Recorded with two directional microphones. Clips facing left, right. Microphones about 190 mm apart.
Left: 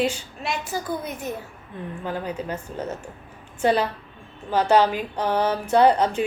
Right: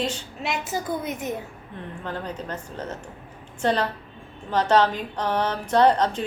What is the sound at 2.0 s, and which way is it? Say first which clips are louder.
Speech: left 3 dB; 5° left (ahead or behind).